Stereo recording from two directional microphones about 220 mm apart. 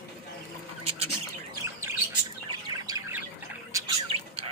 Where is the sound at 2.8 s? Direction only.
15° right (ahead or behind).